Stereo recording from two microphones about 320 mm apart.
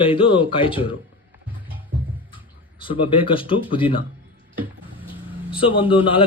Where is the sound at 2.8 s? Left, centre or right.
Centre.